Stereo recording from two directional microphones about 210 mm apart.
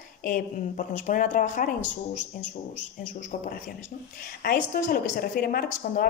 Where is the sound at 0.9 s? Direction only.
40° left (ahead or behind).